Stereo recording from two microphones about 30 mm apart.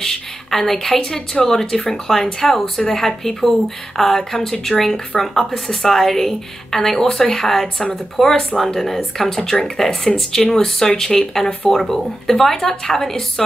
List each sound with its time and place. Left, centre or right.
0.0 s a woman's voice: centre
7.6 s speech: left
8.2 s a woman's voice: centre